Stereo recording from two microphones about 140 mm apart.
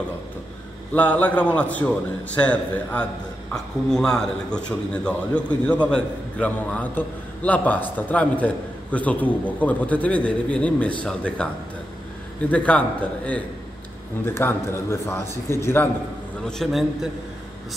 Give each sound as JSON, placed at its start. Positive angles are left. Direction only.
{"t": 0.9, "sound": "a man's voice", "side_deg": 10}
{"t": 12.4, "sound": "a man's voice", "side_deg": 10}
{"t": 16.4, "sound": "a man's voice", "side_deg": 0}